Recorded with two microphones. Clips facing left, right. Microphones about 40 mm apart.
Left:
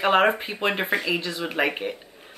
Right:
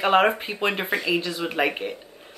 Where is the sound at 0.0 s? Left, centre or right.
Centre.